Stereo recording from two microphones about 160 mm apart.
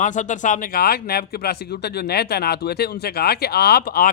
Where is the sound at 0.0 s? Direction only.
50° left (ahead or behind).